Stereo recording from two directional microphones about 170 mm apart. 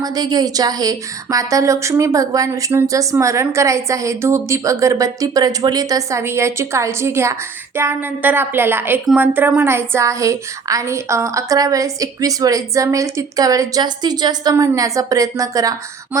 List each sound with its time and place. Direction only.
0.0 s a woman's voice: 25° right (ahead or behind)